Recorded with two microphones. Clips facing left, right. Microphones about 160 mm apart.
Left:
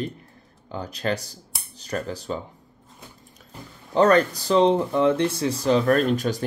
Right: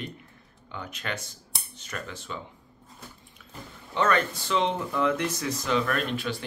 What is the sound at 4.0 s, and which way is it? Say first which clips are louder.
Speech: left 8 dB; 35° left (ahead or behind).